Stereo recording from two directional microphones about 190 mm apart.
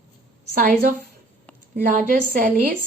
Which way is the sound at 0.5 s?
45° right (ahead or behind).